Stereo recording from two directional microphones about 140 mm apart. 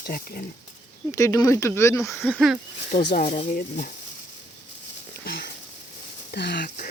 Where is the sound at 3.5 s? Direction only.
90° left.